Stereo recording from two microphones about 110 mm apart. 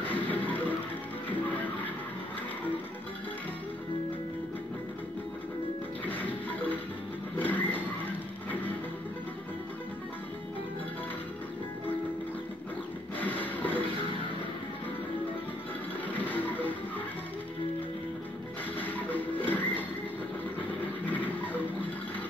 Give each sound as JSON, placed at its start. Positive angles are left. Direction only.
{"t": 0.1, "sound": "music", "side_deg": 15}
{"t": 6.0, "sound": "music", "side_deg": 15}
{"t": 7.3, "sound": "a sound", "side_deg": 15}
{"t": 13.2, "sound": "a sound", "side_deg": 15}
{"t": 16.1, "sound": "music", "side_deg": 15}
{"t": 18.8, "sound": "music", "side_deg": 15}